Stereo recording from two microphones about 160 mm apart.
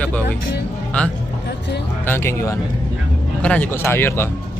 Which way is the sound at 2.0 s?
15° left (ahead or behind).